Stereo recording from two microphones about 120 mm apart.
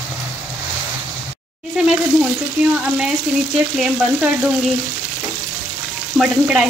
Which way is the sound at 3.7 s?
10° right (ahead or behind).